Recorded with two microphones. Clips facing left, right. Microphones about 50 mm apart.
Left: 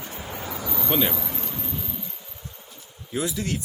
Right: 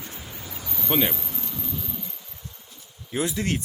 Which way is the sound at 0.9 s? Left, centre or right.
Centre.